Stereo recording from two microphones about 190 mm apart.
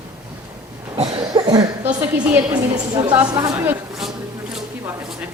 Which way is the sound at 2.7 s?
20° right (ahead or behind).